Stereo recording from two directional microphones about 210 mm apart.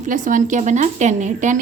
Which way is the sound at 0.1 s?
40° right (ahead or behind).